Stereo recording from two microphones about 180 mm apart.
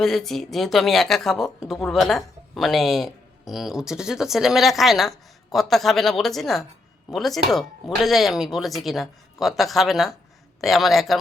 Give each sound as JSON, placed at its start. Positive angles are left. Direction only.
{"t": 0.0, "sound": "speech", "side_deg": 0}